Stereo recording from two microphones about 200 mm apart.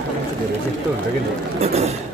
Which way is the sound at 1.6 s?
30° right (ahead or behind).